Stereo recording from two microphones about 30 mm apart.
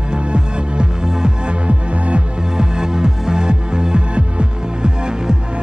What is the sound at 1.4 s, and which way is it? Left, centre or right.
Music, right.